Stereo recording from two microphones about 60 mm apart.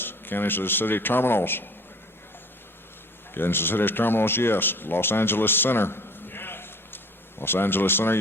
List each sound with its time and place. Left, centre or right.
0.0 s a man's voice: left
3.3 s speech: left